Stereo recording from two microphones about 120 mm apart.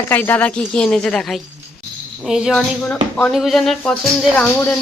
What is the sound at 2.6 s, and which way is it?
Speech, 10° left (ahead or behind).